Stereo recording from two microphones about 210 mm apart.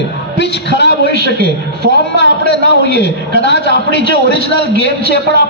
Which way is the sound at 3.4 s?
55° left (ahead or behind).